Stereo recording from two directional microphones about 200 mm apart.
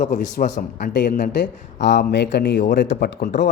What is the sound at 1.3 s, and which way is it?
Speech, 60° left (ahead or behind).